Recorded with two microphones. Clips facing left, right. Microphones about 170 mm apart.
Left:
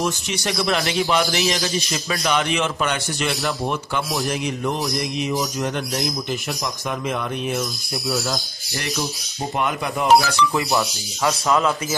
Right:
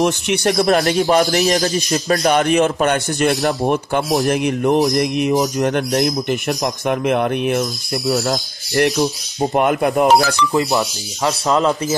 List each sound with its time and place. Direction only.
0.0 s a man's voice: 60° right (ahead or behind)
8.9 s speech: 35° right (ahead or behind)
9.6 s a man's voice: 55° right (ahead or behind)
10.7 s speech: 20° right (ahead or behind)